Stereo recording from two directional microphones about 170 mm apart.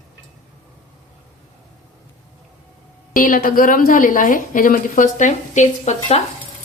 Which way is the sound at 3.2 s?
55° left (ahead or behind).